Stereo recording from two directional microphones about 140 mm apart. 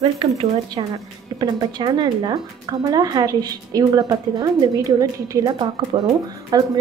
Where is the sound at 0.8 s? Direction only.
35° right (ahead or behind).